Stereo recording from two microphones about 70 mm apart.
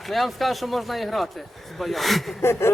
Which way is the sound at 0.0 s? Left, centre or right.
Centre.